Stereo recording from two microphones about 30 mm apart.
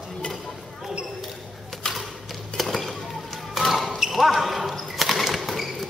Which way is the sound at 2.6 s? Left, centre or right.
Centre.